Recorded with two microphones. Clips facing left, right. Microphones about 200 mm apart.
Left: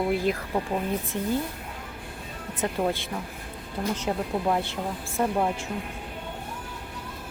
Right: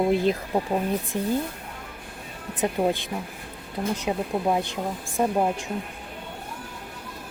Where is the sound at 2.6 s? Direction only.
15° right (ahead or behind).